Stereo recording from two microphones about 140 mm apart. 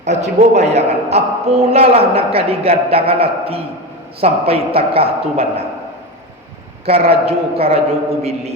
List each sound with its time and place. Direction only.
0.0 s a man's voice: 55° right (ahead or behind)
6.8 s a man's voice: 45° right (ahead or behind)